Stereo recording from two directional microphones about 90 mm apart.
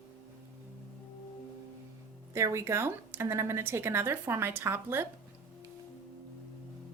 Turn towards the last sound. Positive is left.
turn(degrees=-25)  # may be behind; listen again after turning